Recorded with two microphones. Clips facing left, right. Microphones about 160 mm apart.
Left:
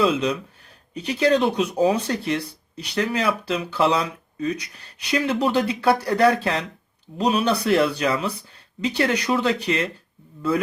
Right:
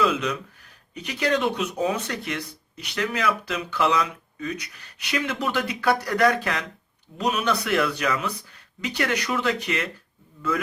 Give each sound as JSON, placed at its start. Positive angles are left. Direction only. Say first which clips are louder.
{"t": 0.0, "sound": "speech", "louder": "left 3 dB", "side_deg": 30}